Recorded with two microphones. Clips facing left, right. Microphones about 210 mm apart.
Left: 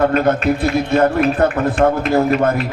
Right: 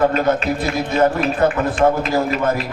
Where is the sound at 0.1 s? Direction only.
55° left (ahead or behind).